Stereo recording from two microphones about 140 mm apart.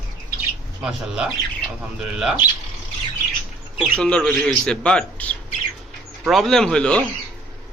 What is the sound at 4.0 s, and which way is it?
A man's voice, 5° left (ahead or behind).